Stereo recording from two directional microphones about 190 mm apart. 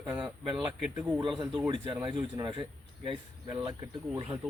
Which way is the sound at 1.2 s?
25° right (ahead or behind).